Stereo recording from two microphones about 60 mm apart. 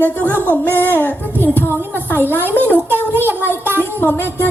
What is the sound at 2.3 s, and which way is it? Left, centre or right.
Speech, left.